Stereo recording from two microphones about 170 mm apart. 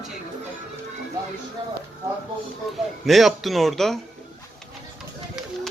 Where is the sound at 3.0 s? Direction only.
Centre (ahead or behind).